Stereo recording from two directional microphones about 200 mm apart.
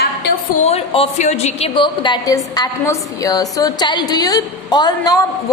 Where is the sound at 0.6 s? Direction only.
30° left (ahead or behind).